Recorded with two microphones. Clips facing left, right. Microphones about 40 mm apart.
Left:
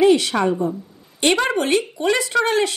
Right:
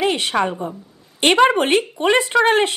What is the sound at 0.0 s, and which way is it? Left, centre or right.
Speech, right.